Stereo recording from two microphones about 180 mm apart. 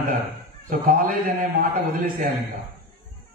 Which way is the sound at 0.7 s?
50° right (ahead or behind).